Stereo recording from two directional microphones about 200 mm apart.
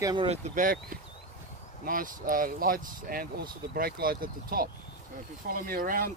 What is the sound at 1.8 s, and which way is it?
Speech, 45° right (ahead or behind).